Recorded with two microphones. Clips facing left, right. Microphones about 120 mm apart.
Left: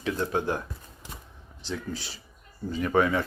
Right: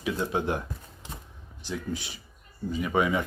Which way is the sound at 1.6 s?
15° right (ahead or behind).